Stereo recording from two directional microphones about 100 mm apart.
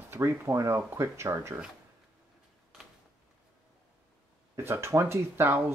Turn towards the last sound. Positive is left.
turn(degrees=-25)  # may be behind; listen again after turning